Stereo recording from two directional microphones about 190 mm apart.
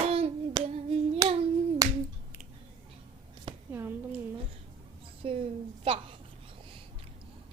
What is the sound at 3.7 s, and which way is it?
Speech, 10° right (ahead or behind).